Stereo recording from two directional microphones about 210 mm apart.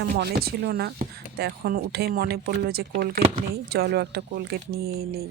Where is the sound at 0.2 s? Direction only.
50° right (ahead or behind).